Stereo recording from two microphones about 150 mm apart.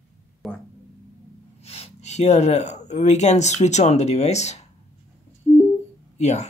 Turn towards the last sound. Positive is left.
turn(degrees=50)  # may be behind; listen again after turning